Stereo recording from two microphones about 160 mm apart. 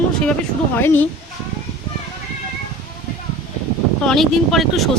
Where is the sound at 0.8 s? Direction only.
15° left (ahead or behind).